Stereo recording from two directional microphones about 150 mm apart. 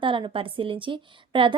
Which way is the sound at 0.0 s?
35° right (ahead or behind).